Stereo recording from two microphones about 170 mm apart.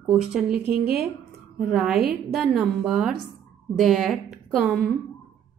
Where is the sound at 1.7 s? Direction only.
Centre (ahead or behind).